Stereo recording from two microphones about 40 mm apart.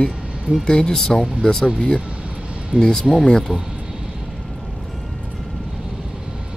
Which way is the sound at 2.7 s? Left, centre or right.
Right.